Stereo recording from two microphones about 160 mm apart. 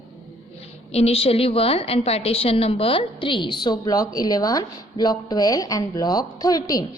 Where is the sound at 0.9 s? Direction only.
40° left (ahead or behind).